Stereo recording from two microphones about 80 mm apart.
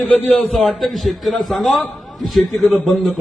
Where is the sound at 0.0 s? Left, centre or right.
Centre.